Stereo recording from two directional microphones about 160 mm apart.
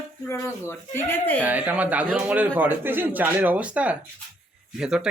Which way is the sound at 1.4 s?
10° right (ahead or behind).